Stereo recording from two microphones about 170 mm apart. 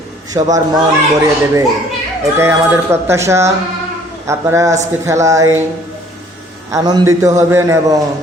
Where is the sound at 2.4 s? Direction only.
15° right (ahead or behind).